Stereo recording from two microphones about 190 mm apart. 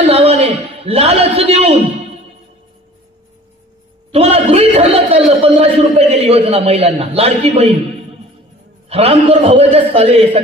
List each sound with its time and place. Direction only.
0.0 s a sound: 30° right (ahead or behind)
4.1 s a man's voice: 30° right (ahead or behind)
8.8 s a man's voice: 30° right (ahead or behind)